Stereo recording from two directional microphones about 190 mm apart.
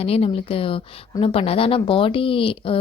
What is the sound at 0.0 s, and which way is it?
A woman's voice, 30° left (ahead or behind).